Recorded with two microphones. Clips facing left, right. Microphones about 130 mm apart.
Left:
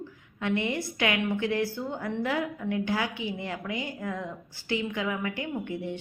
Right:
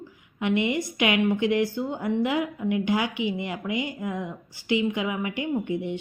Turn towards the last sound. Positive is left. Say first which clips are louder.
# right 5 dB
turn(degrees=-15)  # may be behind; listen again after turning